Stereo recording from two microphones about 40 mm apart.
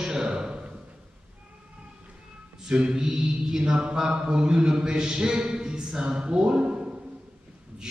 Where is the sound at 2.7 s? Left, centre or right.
Right.